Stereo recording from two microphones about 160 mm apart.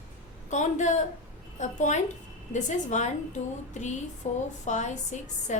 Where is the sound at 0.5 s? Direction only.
50° left (ahead or behind).